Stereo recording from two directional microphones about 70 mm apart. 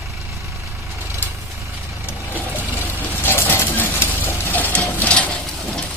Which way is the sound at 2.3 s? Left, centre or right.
Left.